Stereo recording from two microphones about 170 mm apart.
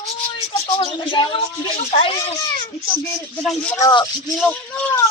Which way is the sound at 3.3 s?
5° left (ahead or behind).